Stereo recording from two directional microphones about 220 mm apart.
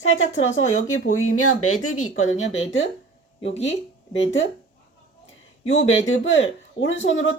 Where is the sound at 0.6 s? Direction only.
65° left (ahead or behind).